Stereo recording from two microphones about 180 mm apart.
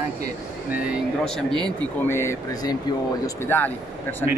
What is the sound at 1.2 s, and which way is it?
Speech, 5° left (ahead or behind).